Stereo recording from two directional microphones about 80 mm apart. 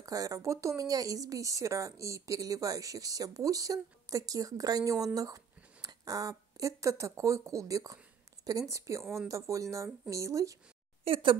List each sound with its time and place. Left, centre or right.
0.0 s a woman's voice: right